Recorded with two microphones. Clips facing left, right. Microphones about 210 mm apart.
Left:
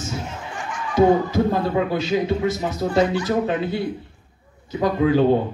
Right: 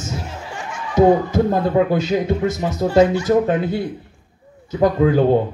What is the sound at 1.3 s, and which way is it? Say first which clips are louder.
Speech: right 3 dB; 50° right (ahead or behind).